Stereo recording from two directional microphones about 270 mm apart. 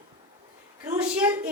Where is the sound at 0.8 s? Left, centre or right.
Centre.